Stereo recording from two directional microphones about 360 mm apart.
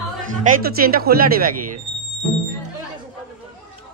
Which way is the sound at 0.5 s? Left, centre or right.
Right.